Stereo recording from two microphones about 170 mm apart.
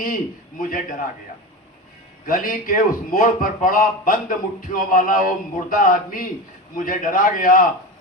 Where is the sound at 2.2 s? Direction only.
55° left (ahead or behind).